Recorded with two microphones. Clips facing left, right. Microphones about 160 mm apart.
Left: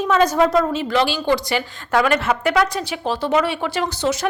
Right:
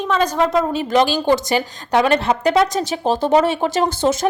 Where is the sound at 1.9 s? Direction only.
20° right (ahead or behind).